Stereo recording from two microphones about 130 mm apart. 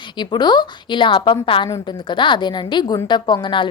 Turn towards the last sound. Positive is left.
turn(degrees=40)  # may be behind; listen again after turning